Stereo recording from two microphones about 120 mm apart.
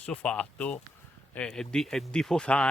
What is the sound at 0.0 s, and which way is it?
Speech, 10° left (ahead or behind).